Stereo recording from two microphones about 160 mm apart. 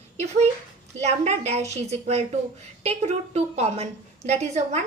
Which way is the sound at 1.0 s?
45° right (ahead or behind).